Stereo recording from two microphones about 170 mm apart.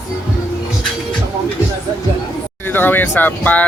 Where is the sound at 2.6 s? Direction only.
10° left (ahead or behind).